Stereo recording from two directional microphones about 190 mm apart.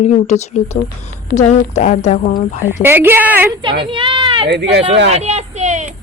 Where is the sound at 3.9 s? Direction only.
25° right (ahead or behind).